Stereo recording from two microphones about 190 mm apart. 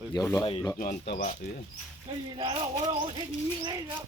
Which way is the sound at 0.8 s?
55° left (ahead or behind).